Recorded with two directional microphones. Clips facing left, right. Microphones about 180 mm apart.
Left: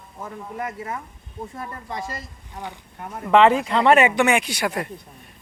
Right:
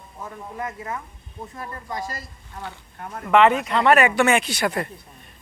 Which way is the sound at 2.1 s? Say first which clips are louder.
Left 1 dB; 15° left (ahead or behind).